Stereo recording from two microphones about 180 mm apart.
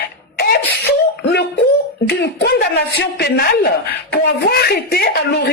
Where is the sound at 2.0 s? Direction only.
70° left (ahead or behind).